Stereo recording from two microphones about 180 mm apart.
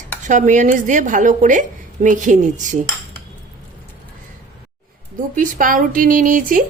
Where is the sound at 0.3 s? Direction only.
45° right (ahead or behind).